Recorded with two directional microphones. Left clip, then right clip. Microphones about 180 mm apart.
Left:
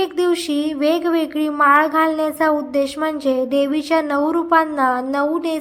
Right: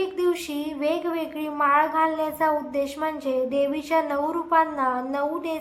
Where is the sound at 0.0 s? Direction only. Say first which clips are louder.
Left 6 dB; 30° left (ahead or behind).